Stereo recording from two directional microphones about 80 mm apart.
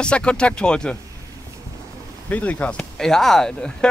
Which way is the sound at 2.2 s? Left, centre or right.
Centre.